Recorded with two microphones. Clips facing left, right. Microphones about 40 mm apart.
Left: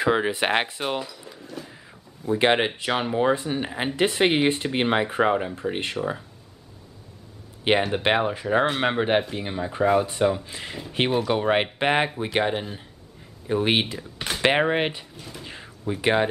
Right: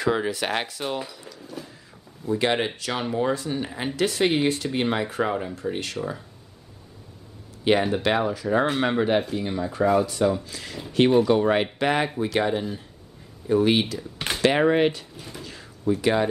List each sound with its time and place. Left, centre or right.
0.0 s speech: left
1.0 s speech: centre
1.4 s a sound: centre
2.2 s speech: left
7.6 s speech: left
8.7 s speech: centre
15.1 s speech: centre
15.9 s speech: left